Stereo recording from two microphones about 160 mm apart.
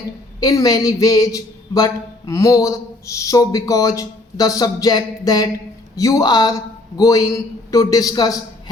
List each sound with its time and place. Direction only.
0.3 s speech: 20° left (ahead or behind)